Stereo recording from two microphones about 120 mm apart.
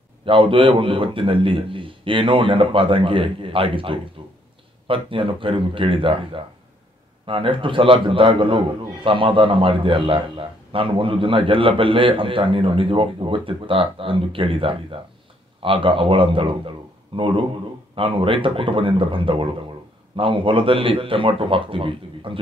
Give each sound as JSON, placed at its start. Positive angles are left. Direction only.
{"t": 0.2, "sound": "a man's voice", "side_deg": -45}